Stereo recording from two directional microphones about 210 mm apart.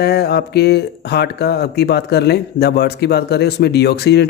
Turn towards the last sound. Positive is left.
turn(degrees=50)  # may be behind; listen again after turning